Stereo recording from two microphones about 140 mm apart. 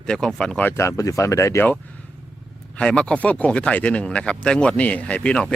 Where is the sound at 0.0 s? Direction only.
5° left (ahead or behind).